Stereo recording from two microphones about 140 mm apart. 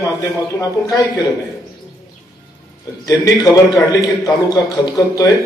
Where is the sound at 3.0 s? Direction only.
25° left (ahead or behind).